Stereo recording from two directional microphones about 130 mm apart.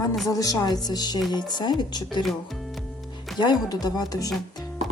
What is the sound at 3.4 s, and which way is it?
Speech, 30° left (ahead or behind).